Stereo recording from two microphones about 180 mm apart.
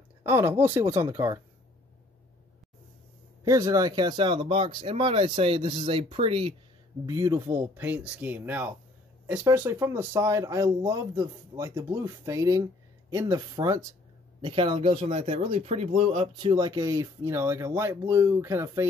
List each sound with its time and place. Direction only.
0.2 s speech: 15° right (ahead or behind)
3.4 s speech: 20° right (ahead or behind)
7.1 s speech: 20° right (ahead or behind)
14.4 s speech: 30° right (ahead or behind)